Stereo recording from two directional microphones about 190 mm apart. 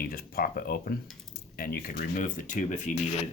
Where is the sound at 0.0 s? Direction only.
50° left (ahead or behind).